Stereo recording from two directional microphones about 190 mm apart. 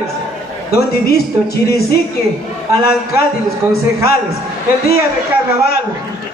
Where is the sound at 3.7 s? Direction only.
55° left (ahead or behind).